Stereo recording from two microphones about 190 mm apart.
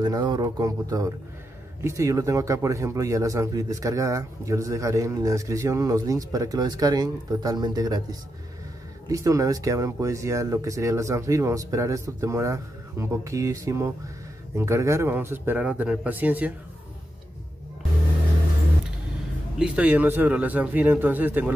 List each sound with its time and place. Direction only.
0.0 s speech: 20° right (ahead or behind)
19.6 s speech: 5° right (ahead or behind)